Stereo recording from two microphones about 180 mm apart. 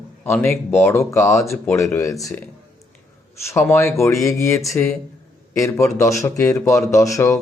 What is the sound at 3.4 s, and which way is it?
A man's voice, 15° left (ahead or behind).